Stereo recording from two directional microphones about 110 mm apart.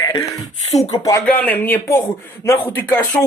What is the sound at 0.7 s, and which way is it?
Speech, 80° left.